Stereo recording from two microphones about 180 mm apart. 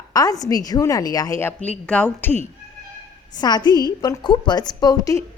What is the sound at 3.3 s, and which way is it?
A woman's voice, 20° left (ahead or behind).